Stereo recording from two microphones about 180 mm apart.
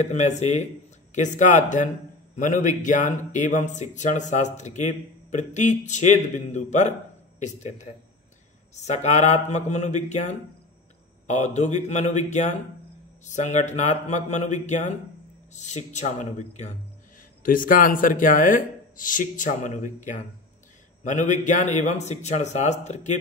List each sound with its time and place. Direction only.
0.0 s a man's voice: 40° left (ahead or behind)